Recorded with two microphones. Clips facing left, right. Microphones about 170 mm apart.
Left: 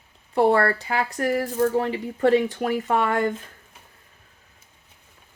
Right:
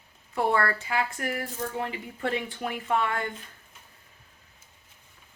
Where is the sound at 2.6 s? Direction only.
65° left (ahead or behind).